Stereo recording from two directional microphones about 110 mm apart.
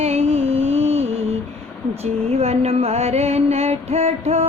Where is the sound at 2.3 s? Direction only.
65° right (ahead or behind).